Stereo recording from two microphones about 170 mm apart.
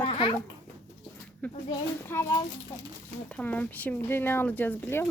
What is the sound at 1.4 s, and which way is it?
Speech, 10° left (ahead or behind).